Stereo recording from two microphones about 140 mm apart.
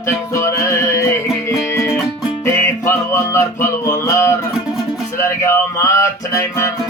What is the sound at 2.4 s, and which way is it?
Music, 15° left (ahead or behind).